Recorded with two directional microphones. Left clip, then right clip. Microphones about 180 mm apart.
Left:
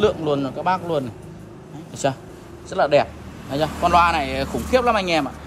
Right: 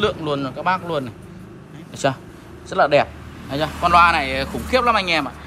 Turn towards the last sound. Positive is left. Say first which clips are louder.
# right 1 dB
turn(degrees=20)  # may be behind; listen again after turning